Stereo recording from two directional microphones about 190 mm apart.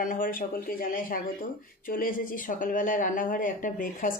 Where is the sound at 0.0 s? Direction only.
45° left (ahead or behind).